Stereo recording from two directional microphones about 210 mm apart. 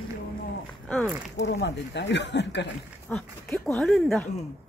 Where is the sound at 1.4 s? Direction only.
55° left (ahead or behind).